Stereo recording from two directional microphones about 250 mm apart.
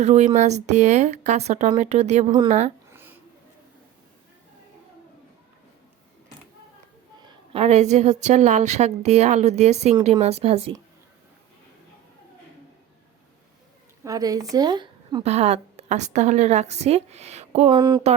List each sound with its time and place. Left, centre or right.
0.0 s a woman's voice: right
2.9 s babbling: centre
7.2 s a woman's voice: right
14.0 s a woman's voice: centre